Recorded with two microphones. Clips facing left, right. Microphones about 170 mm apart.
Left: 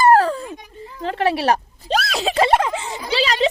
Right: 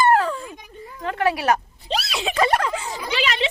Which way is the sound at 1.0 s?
30° left (ahead or behind).